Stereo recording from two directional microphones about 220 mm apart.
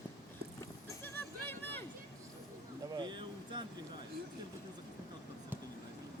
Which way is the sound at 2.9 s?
20° right (ahead or behind).